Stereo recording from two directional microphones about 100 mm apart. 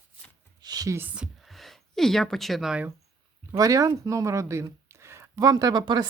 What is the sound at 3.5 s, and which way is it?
Speech, 35° right (ahead or behind).